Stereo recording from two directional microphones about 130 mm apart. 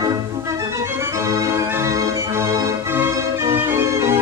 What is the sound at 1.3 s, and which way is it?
Organ, 25° right (ahead or behind).